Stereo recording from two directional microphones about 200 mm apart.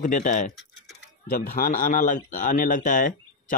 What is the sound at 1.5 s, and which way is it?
Speech, 45° left (ahead or behind).